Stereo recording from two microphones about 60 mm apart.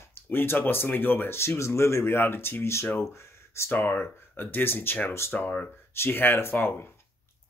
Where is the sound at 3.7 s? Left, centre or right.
Left.